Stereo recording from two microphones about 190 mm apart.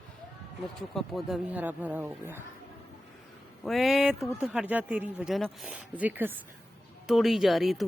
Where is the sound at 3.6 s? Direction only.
Centre (ahead or behind).